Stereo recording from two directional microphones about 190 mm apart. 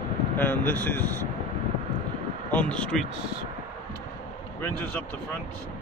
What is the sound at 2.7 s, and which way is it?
Speech, 5° left (ahead or behind).